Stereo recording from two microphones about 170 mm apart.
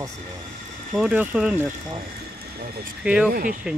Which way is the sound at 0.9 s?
5° right (ahead or behind).